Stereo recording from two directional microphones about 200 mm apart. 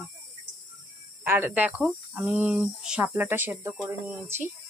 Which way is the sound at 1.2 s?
10° right (ahead or behind).